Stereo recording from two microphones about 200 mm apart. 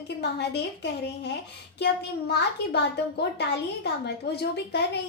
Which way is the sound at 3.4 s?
55° left (ahead or behind).